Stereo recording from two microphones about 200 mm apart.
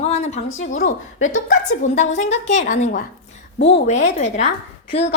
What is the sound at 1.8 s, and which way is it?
A woman's voice, 35° left (ahead or behind).